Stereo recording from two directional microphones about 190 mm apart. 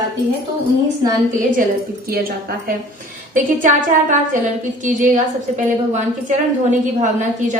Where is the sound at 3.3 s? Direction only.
40° right (ahead or behind).